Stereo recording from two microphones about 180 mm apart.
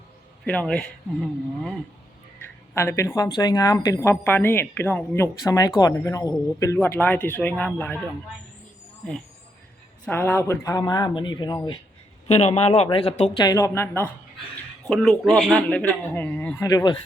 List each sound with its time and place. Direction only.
0.4 s speech: 5° left (ahead or behind)
2.7 s speech: 15° left (ahead or behind)
10.1 s speech: 10° left (ahead or behind)
12.3 s a man's voice: 35° left (ahead or behind)
13.4 s speech: 20° left (ahead or behind)
14.8 s speech: centre (ahead or behind)
16.6 s speech: 25° left (ahead or behind)